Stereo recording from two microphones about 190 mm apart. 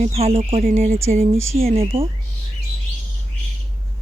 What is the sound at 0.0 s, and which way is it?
Cricket, 35° right (ahead or behind).